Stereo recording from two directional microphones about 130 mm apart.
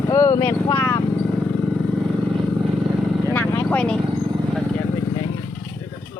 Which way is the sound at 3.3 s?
20° left (ahead or behind).